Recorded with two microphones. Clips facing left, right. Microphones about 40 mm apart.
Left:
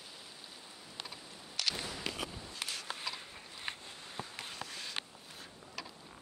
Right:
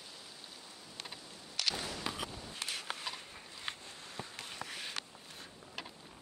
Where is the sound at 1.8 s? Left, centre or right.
Centre.